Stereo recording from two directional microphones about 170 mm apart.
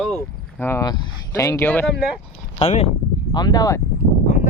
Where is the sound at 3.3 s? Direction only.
25° left (ahead or behind).